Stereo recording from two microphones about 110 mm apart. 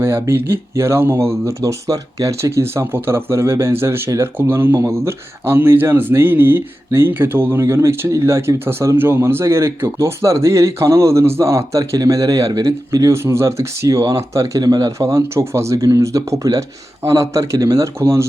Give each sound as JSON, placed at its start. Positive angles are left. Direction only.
{"t": 0.0, "sound": "speech", "side_deg": -25}